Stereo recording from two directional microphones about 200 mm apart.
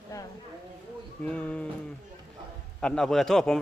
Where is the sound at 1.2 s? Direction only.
5° left (ahead or behind).